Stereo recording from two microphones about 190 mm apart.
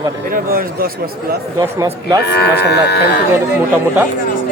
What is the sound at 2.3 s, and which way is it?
Speech, 60° left (ahead or behind).